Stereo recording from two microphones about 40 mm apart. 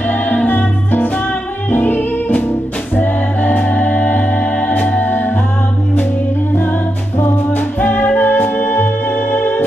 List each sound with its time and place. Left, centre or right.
0.1 s music: left
3.0 s music: left
5.0 s music: left
7.2 s music: left